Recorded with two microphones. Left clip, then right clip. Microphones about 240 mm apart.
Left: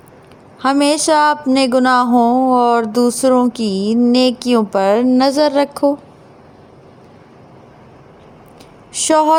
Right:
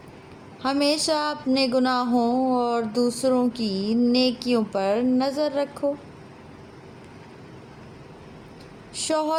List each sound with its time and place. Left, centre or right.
0.6 s speech: left
8.9 s speech: left